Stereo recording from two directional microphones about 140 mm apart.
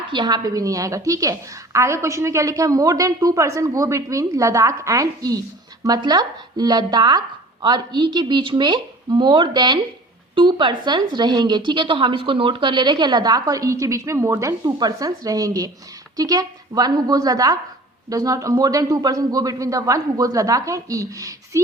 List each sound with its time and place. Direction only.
0.1 s a woman's voice: 30° right (ahead or behind)